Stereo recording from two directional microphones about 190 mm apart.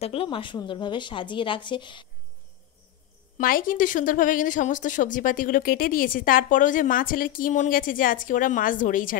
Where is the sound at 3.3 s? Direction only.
45° left (ahead or behind).